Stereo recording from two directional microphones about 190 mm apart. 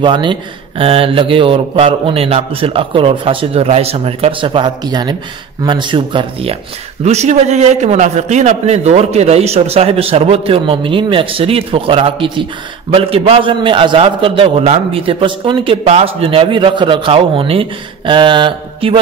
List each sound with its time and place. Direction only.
0.0 s a man's voice: 25° right (ahead or behind)